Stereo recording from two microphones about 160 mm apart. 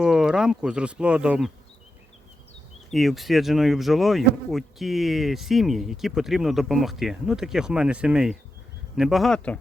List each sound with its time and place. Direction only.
0.0 s speech: 5° right (ahead or behind)
2.9 s speech: centre (ahead or behind)